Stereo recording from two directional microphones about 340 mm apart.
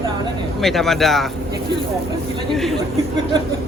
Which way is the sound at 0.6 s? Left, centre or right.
Centre.